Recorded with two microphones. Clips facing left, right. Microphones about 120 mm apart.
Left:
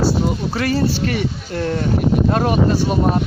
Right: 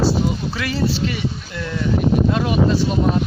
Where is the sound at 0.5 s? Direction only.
40° left (ahead or behind).